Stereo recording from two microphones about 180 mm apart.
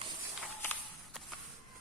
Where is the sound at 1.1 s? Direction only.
5° left (ahead or behind).